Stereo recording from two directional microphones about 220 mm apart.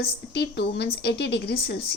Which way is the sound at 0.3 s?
50° left (ahead or behind).